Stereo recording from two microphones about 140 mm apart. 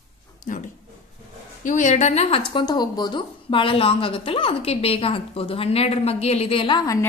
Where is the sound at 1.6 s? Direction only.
65° left (ahead or behind); by 2.6 s 40° left (ahead or behind).